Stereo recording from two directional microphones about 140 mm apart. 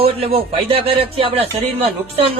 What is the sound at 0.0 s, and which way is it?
Speech, 45° right (ahead or behind).